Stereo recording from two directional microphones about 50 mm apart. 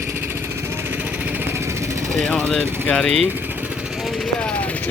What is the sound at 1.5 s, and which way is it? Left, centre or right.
Vehicle, right.